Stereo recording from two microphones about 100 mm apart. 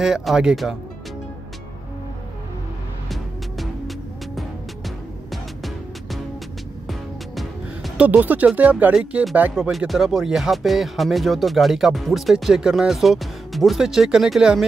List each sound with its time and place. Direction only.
0.0 s speech: 5° right (ahead or behind)
3.1 s music: centre (ahead or behind)
6.9 s music: centre (ahead or behind)
8.0 s speech: 15° right (ahead or behind)
8.9 s speech: 5° right (ahead or behind)
9.3 s speech: 15° right (ahead or behind)
9.7 s speech: centre (ahead or behind)